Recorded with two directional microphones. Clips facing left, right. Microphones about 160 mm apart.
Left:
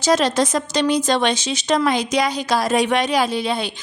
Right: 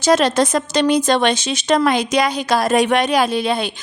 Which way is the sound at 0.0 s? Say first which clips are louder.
Right 3 dB; 55° right (ahead or behind).